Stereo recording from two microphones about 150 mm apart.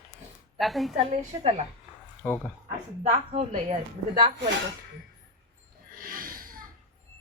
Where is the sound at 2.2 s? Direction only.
15° left (ahead or behind).